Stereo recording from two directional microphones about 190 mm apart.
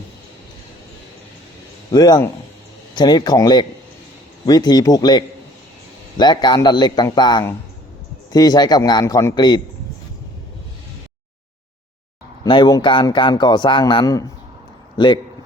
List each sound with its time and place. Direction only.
1.9 s a man's voice: 20° left (ahead or behind)
12.4 s a man's voice: 25° left (ahead or behind)